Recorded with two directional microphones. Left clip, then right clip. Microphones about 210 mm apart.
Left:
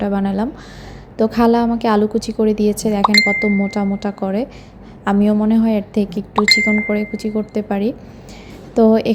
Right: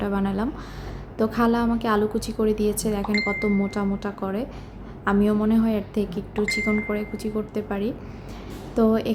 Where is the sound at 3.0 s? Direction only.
50° left (ahead or behind).